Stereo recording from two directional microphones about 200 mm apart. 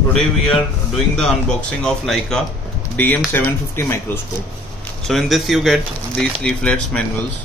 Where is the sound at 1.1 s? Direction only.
5° left (ahead or behind).